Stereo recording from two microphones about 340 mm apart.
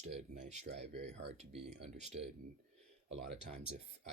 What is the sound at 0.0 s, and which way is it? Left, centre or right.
Speech, centre.